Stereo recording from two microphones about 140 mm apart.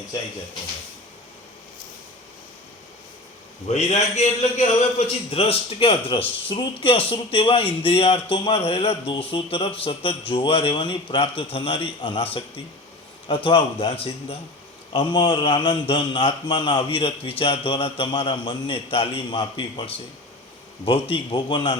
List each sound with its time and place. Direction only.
3.7 s a man's voice: 50° left (ahead or behind); by 21.8 s 35° left (ahead or behind)